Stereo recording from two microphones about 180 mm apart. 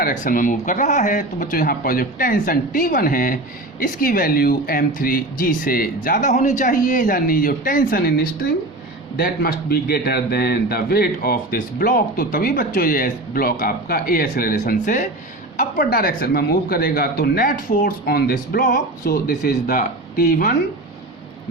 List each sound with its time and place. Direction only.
0.0 s speech: 50° left (ahead or behind)
9.1 s a man's voice: 60° left (ahead or behind)